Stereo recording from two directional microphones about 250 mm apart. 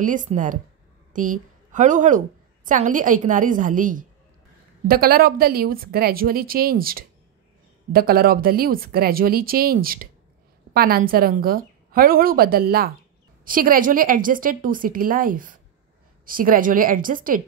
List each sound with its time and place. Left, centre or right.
0.0 s a woman's voice: right